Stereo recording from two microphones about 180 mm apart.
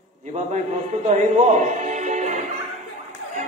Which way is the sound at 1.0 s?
40° right (ahead or behind).